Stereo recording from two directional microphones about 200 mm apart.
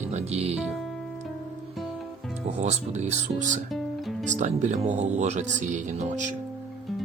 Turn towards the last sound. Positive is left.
turn(degrees=-40)  # may be behind; listen again after turning